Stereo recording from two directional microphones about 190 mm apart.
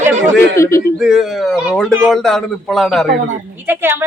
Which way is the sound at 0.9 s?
Centre (ahead or behind).